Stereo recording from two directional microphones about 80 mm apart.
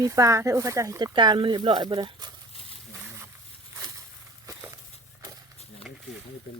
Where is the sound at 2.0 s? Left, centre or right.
Right.